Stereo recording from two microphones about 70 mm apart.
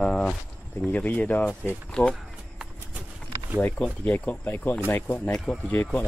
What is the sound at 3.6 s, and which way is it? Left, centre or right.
Speech, left.